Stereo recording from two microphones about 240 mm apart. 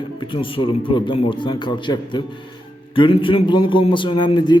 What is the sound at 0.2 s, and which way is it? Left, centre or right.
A man's voice, left.